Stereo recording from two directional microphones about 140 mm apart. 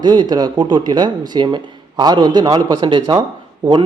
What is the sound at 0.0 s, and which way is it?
A man's voice, 30° right (ahead or behind).